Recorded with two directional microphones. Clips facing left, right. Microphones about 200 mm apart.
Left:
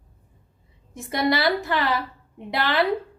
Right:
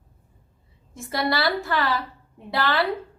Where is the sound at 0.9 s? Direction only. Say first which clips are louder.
Left 2 dB; 20° left (ahead or behind).